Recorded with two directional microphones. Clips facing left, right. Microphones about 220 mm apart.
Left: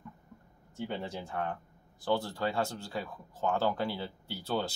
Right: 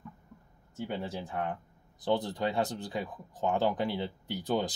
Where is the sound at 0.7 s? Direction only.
5° right (ahead or behind).